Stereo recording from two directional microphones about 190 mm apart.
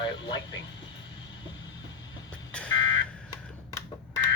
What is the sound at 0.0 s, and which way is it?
Speech, 20° left (ahead or behind).